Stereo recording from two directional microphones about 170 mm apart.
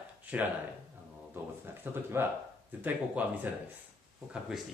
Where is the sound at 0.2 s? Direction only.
10° right (ahead or behind).